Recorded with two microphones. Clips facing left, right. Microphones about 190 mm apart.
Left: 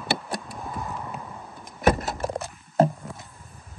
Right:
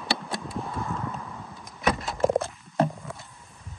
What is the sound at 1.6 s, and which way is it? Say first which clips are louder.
Vehicle: left 5 dB; 45° left (ahead or behind).